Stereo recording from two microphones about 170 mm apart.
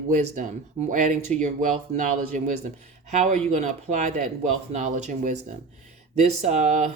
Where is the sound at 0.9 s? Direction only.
45° right (ahead or behind).